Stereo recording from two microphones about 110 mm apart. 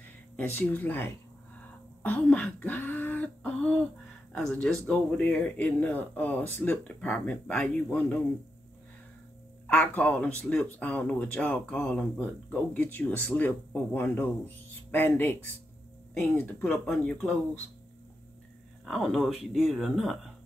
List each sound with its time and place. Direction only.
0.4 s speech: 20° left (ahead or behind)
9.7 s speech: 15° left (ahead or behind)
16.3 s speech: 20° left (ahead or behind)
16.9 s speech: 5° left (ahead or behind)
18.9 s speech: centre (ahead or behind)